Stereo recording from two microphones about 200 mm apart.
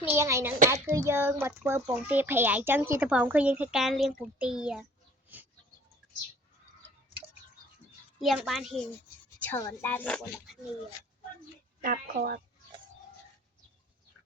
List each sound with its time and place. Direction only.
0.0 s a child's voice: 10° right (ahead or behind)
8.2 s speech: centre (ahead or behind)
9.4 s speech: 10° left (ahead or behind)
11.8 s speech: 45° right (ahead or behind)